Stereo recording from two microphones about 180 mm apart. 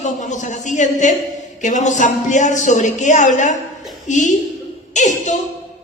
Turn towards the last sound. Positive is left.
turn(degrees=40)  # may be behind; listen again after turning